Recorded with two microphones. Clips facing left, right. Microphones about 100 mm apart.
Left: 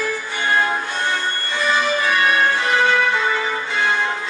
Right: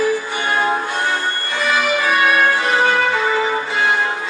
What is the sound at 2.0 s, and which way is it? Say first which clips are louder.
Music: right 4 dB; 15° right (ahead or behind).